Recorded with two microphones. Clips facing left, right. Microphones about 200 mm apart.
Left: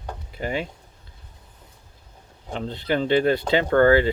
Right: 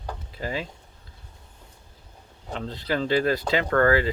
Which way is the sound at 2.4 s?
25° left (ahead or behind).